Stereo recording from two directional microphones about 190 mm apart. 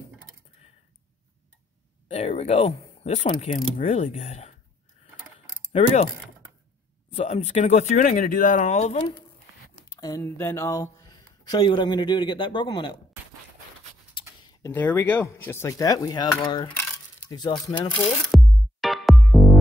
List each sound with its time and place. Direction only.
2.0 s a sound: 35° left (ahead or behind)
3.3 s speech: 25° left (ahead or behind)
5.7 s speech: 35° left (ahead or behind)
7.1 s speech: 35° left (ahead or behind)
9.9 s speech: 20° left (ahead or behind)
14.2 s a sound: 25° left (ahead or behind)
14.6 s speech: 10° left (ahead or behind)
17.9 s music: centre (ahead or behind)